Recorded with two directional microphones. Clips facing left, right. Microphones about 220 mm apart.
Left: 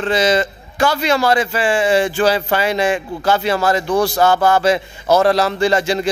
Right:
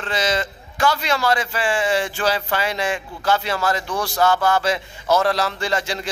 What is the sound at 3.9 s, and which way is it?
Speech, 30° left (ahead or behind).